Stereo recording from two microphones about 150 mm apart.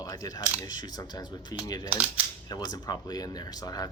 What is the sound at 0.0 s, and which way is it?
Speech, 25° left (ahead or behind).